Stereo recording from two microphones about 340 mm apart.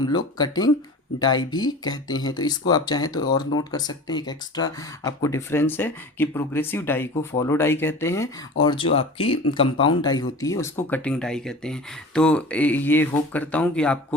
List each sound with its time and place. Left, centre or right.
0.0 s speech: centre